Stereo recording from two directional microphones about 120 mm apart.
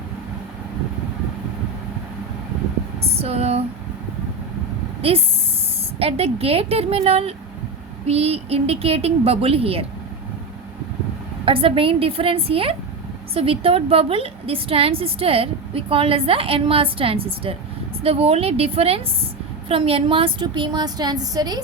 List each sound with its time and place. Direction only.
3.0 s a sound: 55° right (ahead or behind)
5.1 s speech: 55° right (ahead or behind)
11.4 s a woman's voice: 50° right (ahead or behind); by 21.6 s 35° right (ahead or behind)